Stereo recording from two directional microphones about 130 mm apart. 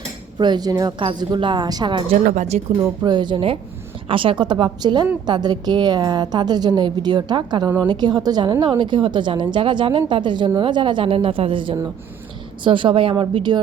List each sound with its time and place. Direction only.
0.3 s a woman's voice: 35° right (ahead or behind)
2.1 s speech: 75° right (ahead or behind)
2.7 s a woman's voice: 30° right (ahead or behind)